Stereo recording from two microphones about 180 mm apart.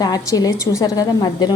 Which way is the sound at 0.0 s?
20° left (ahead or behind).